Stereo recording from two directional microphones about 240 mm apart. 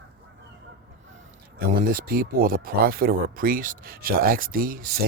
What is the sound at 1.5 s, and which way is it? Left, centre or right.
Speech, right.